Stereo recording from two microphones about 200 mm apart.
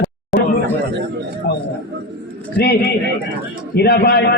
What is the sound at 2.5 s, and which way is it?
A man's voice, 55° left (ahead or behind).